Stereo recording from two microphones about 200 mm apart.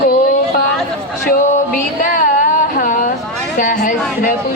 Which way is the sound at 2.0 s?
40° left (ahead or behind).